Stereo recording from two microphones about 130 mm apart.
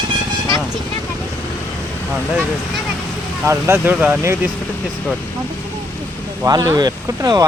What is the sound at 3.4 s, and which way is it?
Speech, 20° right (ahead or behind).